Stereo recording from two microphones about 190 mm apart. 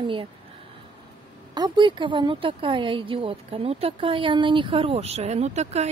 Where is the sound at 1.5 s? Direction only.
25° right (ahead or behind).